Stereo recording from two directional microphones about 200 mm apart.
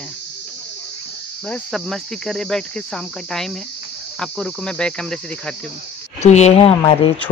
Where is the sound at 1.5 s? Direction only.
Centre (ahead or behind).